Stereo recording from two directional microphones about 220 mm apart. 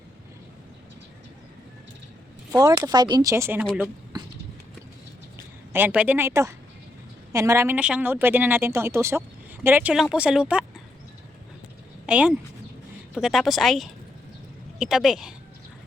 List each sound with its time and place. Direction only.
2.6 s speech: 15° right (ahead or behind)
4.1 s a sound: 15° right (ahead or behind)
5.7 s speech: 5° right (ahead or behind)
12.0 s speech: 5° right (ahead or behind)